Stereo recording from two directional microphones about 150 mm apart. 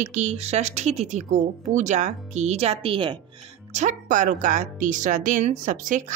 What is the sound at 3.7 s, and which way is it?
A woman's voice, 55° right (ahead or behind).